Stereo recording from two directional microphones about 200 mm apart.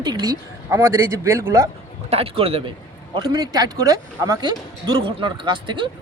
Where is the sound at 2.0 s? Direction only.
30° right (ahead or behind).